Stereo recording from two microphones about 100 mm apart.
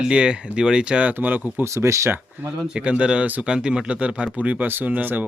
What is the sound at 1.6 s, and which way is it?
Speech, 30° right (ahead or behind).